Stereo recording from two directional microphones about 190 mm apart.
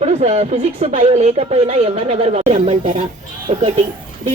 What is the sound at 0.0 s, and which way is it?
Speech, 35° right (ahead or behind).